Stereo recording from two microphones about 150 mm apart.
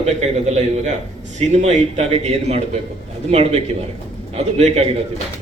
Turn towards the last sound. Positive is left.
turn(degrees=-45)  # may be behind; listen again after turning